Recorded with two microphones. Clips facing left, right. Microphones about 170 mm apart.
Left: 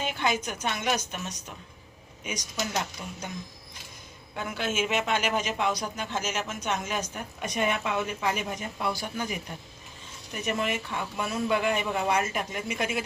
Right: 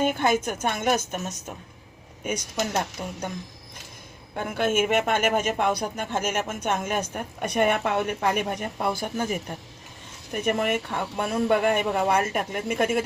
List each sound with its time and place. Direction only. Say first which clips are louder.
0.0 s speech: right 6 dB; 50° right (ahead or behind)
4.4 s speech: right 6 dB; 55° right (ahead or behind)